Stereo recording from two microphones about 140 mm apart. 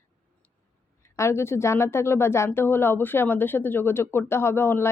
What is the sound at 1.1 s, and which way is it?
A woman's voice, 20° left (ahead or behind).